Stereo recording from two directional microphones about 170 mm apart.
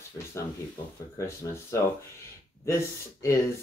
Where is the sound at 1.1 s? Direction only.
15° left (ahead or behind).